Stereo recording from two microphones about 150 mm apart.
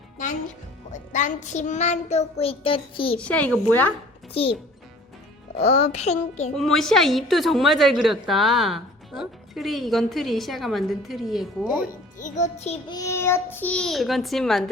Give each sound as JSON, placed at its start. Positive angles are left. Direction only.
{"t": 1.1, "sound": "child singing", "side_deg": 55}
{"t": 3.2, "sound": "a woman's voice", "side_deg": 10}
{"t": 5.5, "sound": "child singing", "side_deg": 50}
{"t": 6.6, "sound": "a woman's voice", "side_deg": 0}
{"t": 11.8, "sound": "child singing", "side_deg": 60}
{"t": 12.9, "sound": "a woman's voice", "side_deg": 20}